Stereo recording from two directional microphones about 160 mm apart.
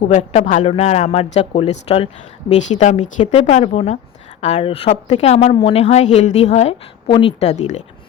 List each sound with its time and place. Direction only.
0.1 s a woman's voice: 50° left (ahead or behind)
0.6 s speech: 40° left (ahead or behind)
2.5 s a woman's voice: 45° left (ahead or behind)